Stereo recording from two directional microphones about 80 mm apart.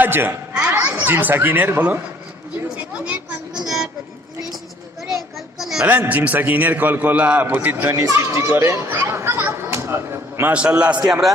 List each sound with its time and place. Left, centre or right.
0.0 s a man's voice: right
0.6 s children playing: right
0.9 s a man's voice: right
2.7 s a sound: centre
5.0 s a sound: centre
5.8 s a man's voice: right
8.0 s chatter: right
10.5 s a man's voice: centre
10.9 s a man's voice: right